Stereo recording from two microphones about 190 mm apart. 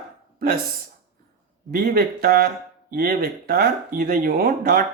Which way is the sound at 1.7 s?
50° right (ahead or behind).